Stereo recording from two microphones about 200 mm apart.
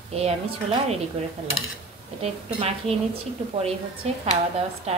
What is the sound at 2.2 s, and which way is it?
Speech, 30° right (ahead or behind).